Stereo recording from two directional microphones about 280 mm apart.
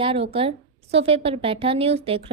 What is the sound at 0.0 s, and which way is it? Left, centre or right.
A woman's voice, centre.